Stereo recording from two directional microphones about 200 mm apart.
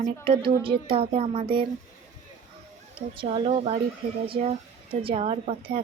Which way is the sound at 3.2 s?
25° right (ahead or behind).